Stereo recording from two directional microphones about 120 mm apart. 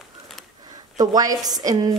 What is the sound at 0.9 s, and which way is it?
Speech, 30° right (ahead or behind).